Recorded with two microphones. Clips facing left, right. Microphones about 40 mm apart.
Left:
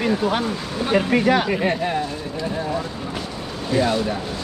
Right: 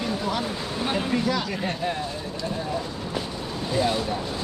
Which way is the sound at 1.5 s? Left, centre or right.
Left.